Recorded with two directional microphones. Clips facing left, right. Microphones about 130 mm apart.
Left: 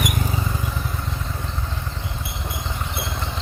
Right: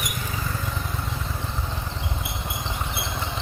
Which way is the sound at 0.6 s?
5° left (ahead or behind).